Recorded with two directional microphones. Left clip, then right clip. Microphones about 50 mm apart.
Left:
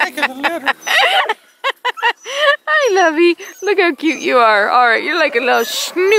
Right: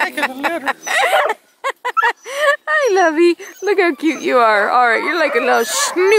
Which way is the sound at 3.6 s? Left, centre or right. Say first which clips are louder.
Left 1 dB; right.